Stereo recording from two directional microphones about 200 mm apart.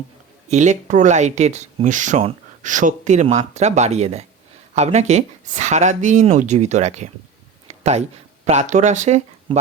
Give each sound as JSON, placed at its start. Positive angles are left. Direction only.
{"t": 0.5, "sound": "speech", "side_deg": -35}
{"t": 7.7, "sound": "a sound", "side_deg": -35}
{"t": 8.4, "sound": "speech", "side_deg": -35}